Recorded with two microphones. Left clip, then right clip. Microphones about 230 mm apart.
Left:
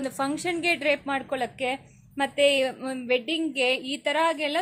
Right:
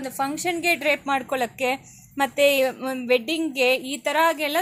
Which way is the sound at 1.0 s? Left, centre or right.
Centre.